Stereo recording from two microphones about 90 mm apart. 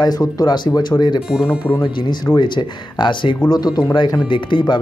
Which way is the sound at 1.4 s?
25° left (ahead or behind).